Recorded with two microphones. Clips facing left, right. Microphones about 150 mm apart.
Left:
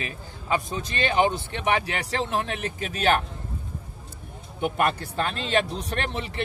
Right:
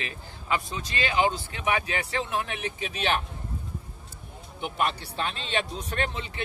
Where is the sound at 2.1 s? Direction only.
35° left (ahead or behind).